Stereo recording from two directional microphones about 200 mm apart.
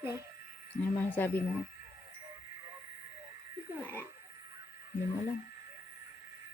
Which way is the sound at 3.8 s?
10° left (ahead or behind).